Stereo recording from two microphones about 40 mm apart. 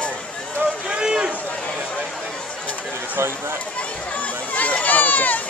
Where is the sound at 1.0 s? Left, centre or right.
Right.